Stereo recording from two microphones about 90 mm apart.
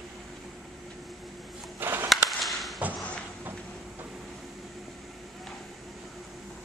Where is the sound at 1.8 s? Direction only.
25° right (ahead or behind).